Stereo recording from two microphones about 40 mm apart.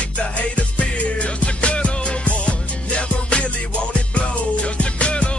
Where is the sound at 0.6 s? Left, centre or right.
Left.